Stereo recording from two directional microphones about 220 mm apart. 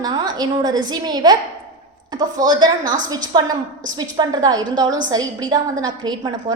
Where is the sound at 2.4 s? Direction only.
20° right (ahead or behind).